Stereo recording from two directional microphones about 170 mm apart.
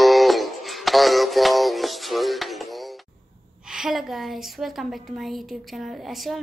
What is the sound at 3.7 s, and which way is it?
A woman's voice, centre (ahead or behind).